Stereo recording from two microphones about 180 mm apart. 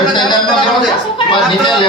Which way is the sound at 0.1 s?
25° left (ahead or behind).